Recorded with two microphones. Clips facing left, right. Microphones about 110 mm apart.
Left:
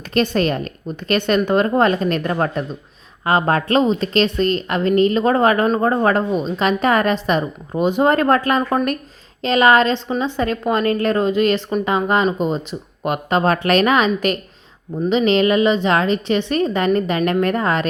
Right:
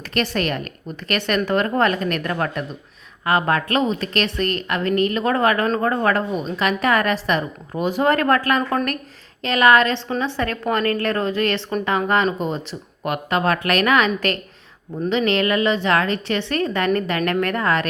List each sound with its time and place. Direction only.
0.1 s a woman's voice: 25° left (ahead or behind)